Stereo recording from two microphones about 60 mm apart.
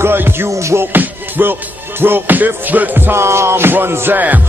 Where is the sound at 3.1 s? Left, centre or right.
Right.